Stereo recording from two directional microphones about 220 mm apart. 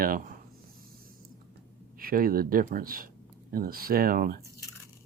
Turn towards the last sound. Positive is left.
turn(degrees=-40)  # may be behind; listen again after turning